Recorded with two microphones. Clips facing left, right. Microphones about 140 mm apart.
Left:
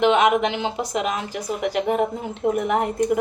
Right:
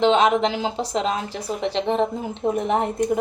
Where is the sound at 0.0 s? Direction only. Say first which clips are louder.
Even; 30° right (ahead or behind).